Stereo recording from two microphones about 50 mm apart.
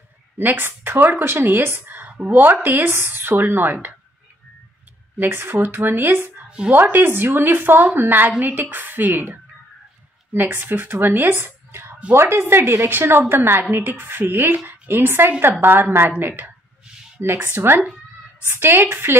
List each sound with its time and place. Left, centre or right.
0.4 s a woman's voice: right
5.3 s a woman's voice: right
12.1 s a woman's voice: right